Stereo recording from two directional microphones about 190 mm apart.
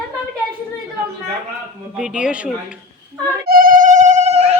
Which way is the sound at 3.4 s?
50° right (ahead or behind).